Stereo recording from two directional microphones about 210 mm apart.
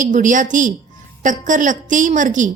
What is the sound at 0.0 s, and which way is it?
Speech, 35° right (ahead or behind).